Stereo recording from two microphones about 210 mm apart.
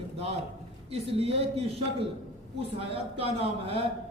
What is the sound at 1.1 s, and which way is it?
A man's voice, 30° right (ahead or behind).